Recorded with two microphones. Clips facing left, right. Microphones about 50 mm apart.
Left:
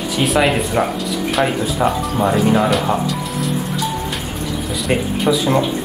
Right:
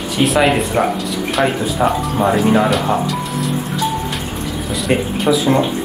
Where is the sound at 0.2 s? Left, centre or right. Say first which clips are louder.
Right 2 dB; centre.